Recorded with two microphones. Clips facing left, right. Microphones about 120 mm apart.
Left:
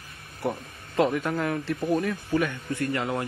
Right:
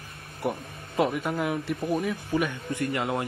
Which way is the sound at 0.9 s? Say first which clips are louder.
Left 2 dB; 5° right (ahead or behind).